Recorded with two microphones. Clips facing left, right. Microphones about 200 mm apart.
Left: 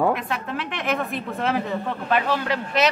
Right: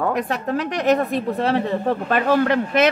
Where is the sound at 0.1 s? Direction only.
40° right (ahead or behind).